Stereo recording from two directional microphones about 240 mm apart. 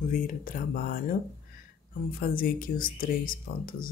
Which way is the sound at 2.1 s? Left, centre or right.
Left.